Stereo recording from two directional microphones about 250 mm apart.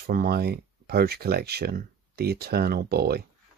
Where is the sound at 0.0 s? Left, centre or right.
Right.